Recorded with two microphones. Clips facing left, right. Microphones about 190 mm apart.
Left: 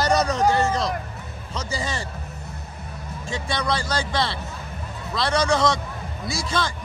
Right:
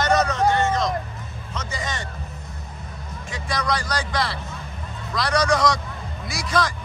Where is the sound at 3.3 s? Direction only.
30° left (ahead or behind).